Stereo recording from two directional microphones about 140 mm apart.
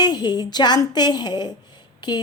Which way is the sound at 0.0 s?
30° left (ahead or behind).